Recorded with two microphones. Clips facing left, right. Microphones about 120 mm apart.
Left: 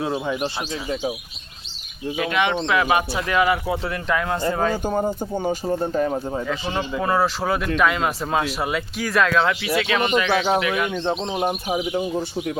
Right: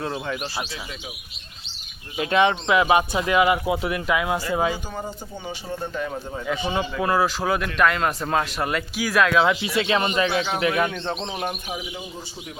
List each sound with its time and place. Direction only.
0.0 s speech: 10° left (ahead or behind)
2.3 s speech: 30° right (ahead or behind); by 4.8 s 10° right (ahead or behind)
4.9 s speech: 50° left (ahead or behind)
7.0 s speech: centre (ahead or behind)
9.5 s speech: 25° right (ahead or behind)
10.3 s speech: 35° left (ahead or behind)
10.6 s speech: 35° right (ahead or behind)
10.9 s speech: 15° left (ahead or behind)